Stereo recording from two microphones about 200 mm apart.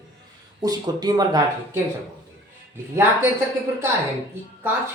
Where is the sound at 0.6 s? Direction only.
20° right (ahead or behind).